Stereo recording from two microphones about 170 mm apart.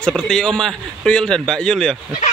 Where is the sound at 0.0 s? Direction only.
5° left (ahead or behind).